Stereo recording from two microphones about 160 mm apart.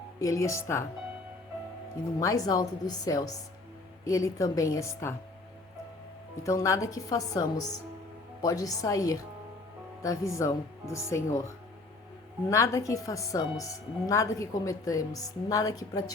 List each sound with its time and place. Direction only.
0.2 s a woman's voice: 20° left (ahead or behind)
2.1 s a woman's voice: 20° left (ahead or behind)
6.4 s a woman's voice: 20° left (ahead or behind)
12.5 s a woman's voice: 20° left (ahead or behind)